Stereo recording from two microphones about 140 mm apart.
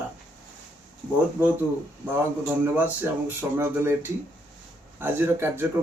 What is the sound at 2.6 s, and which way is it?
Speech, 15° right (ahead or behind).